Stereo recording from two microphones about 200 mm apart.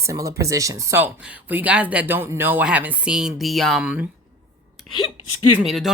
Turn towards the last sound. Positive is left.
turn(degrees=0)  # may be behind; listen again after turning